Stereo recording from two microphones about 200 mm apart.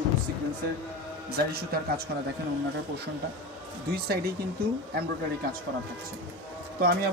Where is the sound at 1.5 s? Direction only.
50° right (ahead or behind).